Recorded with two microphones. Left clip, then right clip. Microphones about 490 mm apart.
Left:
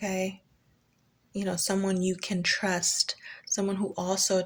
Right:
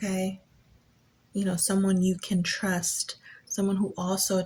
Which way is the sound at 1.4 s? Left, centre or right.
Left.